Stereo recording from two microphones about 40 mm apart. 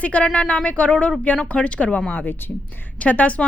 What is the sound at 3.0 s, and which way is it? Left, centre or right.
Speech, left.